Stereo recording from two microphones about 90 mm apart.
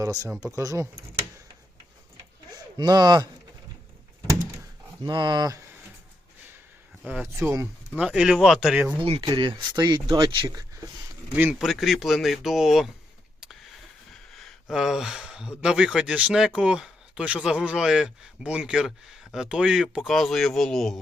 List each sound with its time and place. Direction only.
0.0 s speech: 40° right (ahead or behind)
2.7 s speech: 50° right (ahead or behind)
5.0 s speech: 55° right (ahead or behind)
7.0 s speech: 15° right (ahead or behind)
8.0 s speech: 5° right (ahead or behind)
9.0 s speech: 90° right
9.2 s speech: 60° right (ahead or behind)
9.7 s speech: 50° right (ahead or behind)
10.5 s speech: 40° right (ahead or behind)
11.6 s speech: centre (ahead or behind)
14.3 s speech: 5° right (ahead or behind)
20.1 s speech: centre (ahead or behind)